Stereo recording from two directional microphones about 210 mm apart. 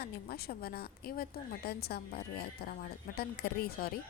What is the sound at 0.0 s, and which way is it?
A woman's voice, 50° left (ahead or behind).